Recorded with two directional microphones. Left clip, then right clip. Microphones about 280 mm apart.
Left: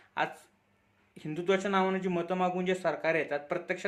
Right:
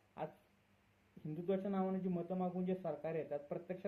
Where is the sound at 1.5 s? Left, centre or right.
Centre.